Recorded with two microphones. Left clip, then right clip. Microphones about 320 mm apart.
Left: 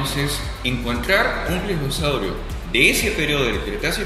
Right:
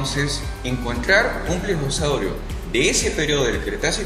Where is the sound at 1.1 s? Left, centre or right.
Right.